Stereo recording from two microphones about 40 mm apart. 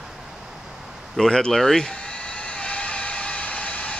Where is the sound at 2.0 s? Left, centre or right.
Left.